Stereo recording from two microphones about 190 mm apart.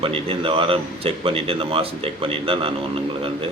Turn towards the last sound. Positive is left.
turn(degrees=-30)  # may be behind; listen again after turning